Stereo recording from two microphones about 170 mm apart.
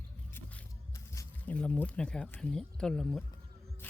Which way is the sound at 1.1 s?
15° left (ahead or behind).